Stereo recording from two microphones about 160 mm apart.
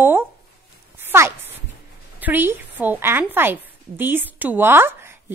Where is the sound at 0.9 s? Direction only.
15° right (ahead or behind).